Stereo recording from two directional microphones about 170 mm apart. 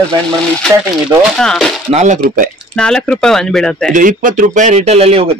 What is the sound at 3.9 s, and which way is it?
Speech, 50° right (ahead or behind).